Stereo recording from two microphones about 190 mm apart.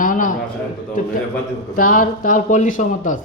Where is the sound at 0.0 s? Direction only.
45° left (ahead or behind).